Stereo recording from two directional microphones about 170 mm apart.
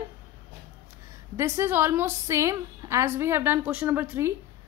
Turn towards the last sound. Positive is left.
turn(degrees=-10)  # may be behind; listen again after turning